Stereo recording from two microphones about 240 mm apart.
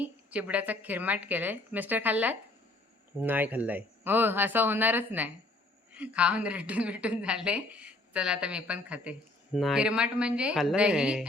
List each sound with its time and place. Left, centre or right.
0.0 s a woman's voice: centre